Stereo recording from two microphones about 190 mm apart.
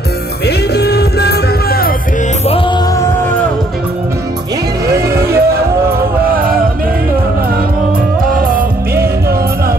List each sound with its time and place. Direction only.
0.5 s music: 60° left (ahead or behind)
4.9 s vehicle: 15° right (ahead or behind)
6.3 s music: 50° right (ahead or behind)
8.3 s music: 45° right (ahead or behind)